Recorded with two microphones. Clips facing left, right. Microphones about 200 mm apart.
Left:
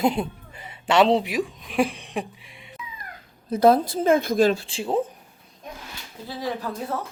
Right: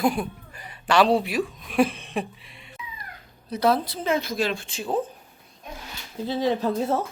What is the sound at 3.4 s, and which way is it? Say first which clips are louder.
A woman's voice: left 5 dB; 50° left (ahead or behind).